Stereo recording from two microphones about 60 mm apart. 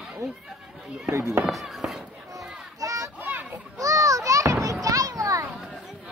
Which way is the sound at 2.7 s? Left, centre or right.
Right.